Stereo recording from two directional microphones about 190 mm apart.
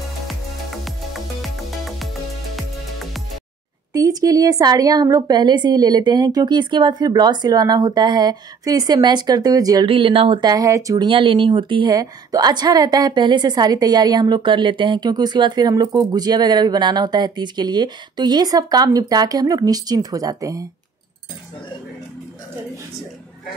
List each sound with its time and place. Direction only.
0.3 s music: centre (ahead or behind)
3.9 s a woman's voice: 20° right (ahead or behind)